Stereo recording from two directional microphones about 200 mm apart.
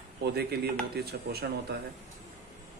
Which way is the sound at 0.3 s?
55° right (ahead or behind).